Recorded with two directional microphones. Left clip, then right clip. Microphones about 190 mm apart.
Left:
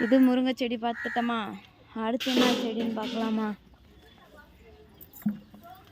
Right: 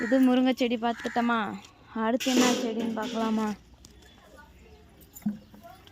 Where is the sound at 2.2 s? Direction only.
50° right (ahead or behind).